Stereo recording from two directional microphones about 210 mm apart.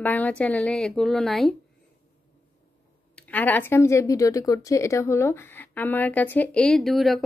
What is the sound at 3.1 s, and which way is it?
Speech, 10° left (ahead or behind).